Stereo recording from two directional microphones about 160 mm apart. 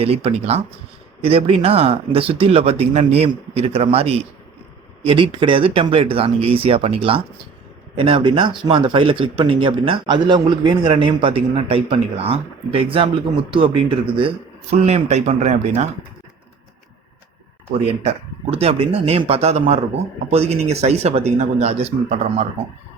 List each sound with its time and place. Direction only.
0.0 s speech: 35° right (ahead or behind)
18.5 s speech: 35° right (ahead or behind)